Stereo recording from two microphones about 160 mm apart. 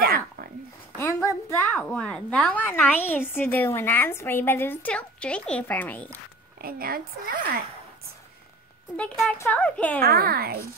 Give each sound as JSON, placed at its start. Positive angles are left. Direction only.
{"t": 0.0, "sound": "a sound", "side_deg": -70}
{"t": 0.9, "sound": "a sound", "side_deg": 15}
{"t": 1.9, "sound": "a woman's voice", "side_deg": 5}
{"t": 6.6, "sound": "a woman's voice", "side_deg": -65}
{"t": 8.9, "sound": "a woman's voice", "side_deg": 5}
{"t": 10.0, "sound": "a woman's voice", "side_deg": -70}